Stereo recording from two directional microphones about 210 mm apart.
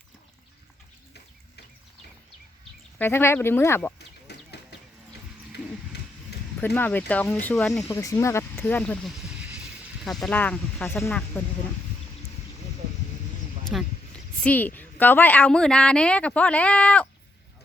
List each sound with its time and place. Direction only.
3.0 s speech: 10° left (ahead or behind)
3.9 s a sound: 50° left (ahead or behind)
6.6 s speech: 10° left (ahead or behind)
13.7 s speech: 5° left (ahead or behind)